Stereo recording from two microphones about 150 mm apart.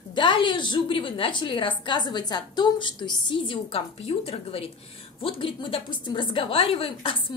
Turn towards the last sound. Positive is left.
turn(degrees=35)  # may be behind; listen again after turning